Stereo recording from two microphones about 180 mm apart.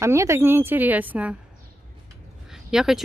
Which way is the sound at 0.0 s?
15° right (ahead or behind).